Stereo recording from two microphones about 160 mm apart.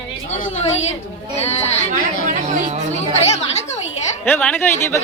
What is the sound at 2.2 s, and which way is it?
Speech, 50° right (ahead or behind).